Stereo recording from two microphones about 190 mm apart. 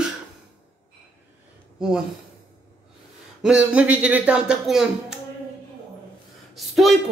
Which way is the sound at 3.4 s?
5° right (ahead or behind).